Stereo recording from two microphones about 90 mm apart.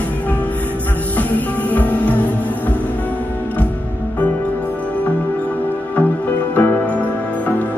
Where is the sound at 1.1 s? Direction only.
20° left (ahead or behind).